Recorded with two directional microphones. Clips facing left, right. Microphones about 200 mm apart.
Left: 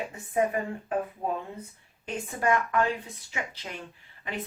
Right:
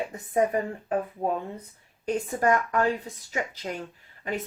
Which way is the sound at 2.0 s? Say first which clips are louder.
Right 4 dB; 40° right (ahead or behind).